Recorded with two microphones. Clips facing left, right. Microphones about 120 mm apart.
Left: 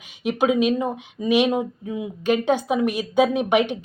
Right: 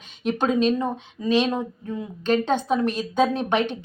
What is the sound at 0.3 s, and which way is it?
Speech, 10° left (ahead or behind).